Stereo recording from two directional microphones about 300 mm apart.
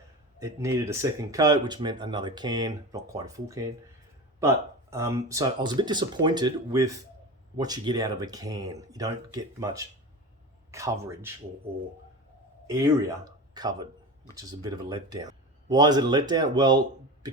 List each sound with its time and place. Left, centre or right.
0.3 s speech: centre
12.6 s speech: centre